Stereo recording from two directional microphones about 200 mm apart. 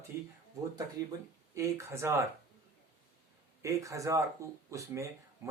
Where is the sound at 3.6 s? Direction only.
15° right (ahead or behind).